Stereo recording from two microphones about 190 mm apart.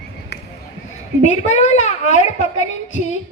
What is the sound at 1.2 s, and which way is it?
A woman's voice, 40° left (ahead or behind).